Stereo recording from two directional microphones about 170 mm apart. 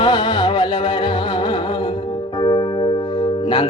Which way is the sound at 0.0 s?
25° left (ahead or behind).